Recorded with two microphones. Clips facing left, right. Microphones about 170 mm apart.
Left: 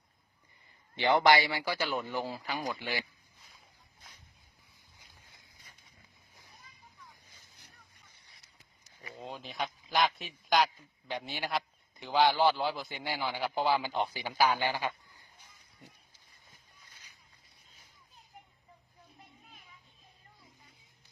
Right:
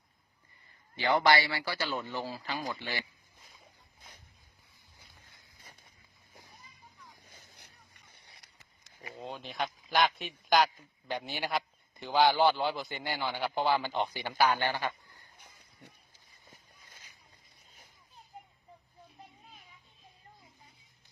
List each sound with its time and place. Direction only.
0.9 s a man's voice: 20° left (ahead or behind)
7.3 s vehicle: 65° right (ahead or behind)
9.1 s a man's voice: centre (ahead or behind)
15.4 s a sound: 65° right (ahead or behind)